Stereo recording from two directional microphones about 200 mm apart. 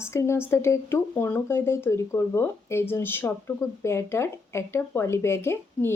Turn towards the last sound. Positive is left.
turn(degrees=10)  # may be behind; listen again after turning